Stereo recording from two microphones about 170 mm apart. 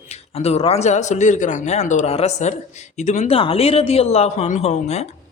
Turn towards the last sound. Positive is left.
turn(degrees=40)  # may be behind; listen again after turning